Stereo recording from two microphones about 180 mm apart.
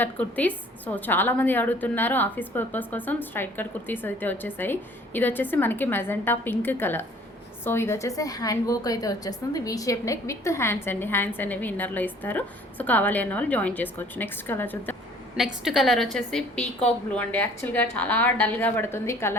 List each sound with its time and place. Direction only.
0.0 s a woman's voice: 10° left (ahead or behind)
15.6 s a woman's voice: centre (ahead or behind)